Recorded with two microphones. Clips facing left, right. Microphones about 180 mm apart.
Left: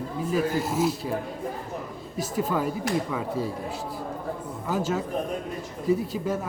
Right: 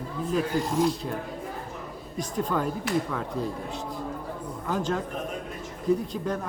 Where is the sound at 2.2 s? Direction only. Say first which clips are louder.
Left 1 dB; 5° left (ahead or behind).